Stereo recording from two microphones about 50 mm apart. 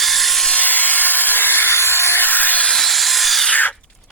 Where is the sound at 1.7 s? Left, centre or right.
Left.